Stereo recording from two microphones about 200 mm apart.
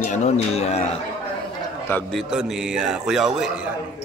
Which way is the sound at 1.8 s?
10° left (ahead or behind).